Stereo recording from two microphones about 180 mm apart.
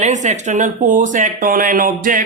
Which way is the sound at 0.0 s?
40° right (ahead or behind).